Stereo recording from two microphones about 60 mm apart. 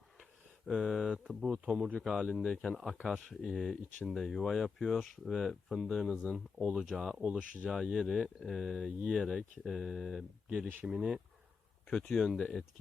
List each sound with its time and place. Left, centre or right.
0.2 s a sound: centre
1.2 s a man's voice: centre
2.0 s speech: centre
7.7 s speech: centre
10.5 s a man's voice: centre
11.9 s speech: centre